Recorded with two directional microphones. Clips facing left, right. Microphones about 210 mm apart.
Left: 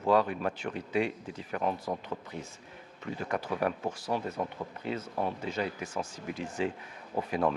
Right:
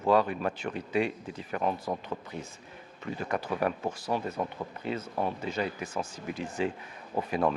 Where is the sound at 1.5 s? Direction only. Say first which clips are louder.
Right 1 dB; 30° right (ahead or behind).